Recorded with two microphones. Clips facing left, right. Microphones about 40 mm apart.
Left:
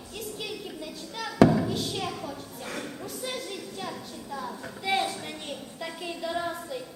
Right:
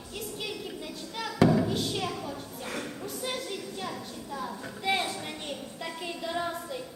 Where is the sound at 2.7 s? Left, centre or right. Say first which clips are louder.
Even; centre.